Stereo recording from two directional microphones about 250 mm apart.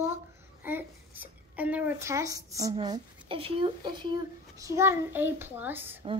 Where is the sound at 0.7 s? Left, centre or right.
Centre.